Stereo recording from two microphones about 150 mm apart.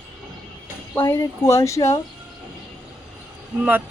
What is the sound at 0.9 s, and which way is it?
Speech, 15° left (ahead or behind).